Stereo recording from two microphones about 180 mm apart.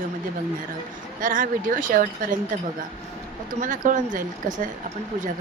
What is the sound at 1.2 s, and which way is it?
Speech, 50° right (ahead or behind).